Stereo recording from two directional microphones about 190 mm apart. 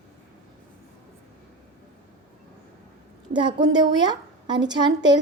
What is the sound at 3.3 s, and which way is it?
A woman's voice, 25° right (ahead or behind).